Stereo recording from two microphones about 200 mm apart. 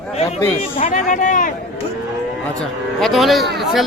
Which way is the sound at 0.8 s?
40° left (ahead or behind).